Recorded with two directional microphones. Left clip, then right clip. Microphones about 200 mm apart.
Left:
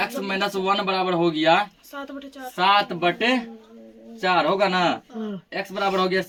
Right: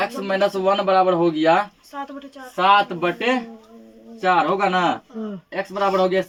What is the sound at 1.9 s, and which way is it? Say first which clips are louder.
Speech: right 3 dB; 30° left (ahead or behind).